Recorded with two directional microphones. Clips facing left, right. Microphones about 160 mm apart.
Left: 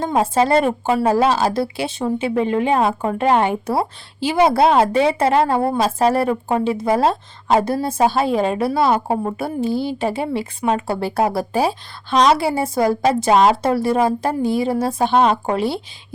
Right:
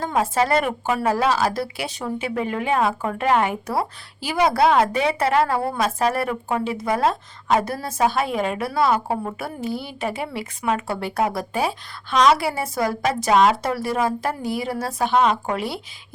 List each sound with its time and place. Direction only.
0.0 s speech: 25° left (ahead or behind)